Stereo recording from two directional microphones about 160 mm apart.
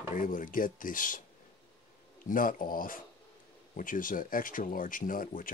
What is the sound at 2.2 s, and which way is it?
Speech, 60° left (ahead or behind).